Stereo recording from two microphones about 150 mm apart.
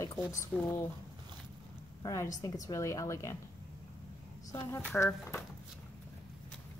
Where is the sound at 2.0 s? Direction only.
20° left (ahead or behind).